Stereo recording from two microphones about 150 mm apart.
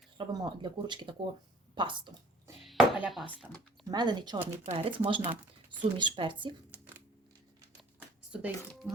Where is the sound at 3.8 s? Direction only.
30° right (ahead or behind).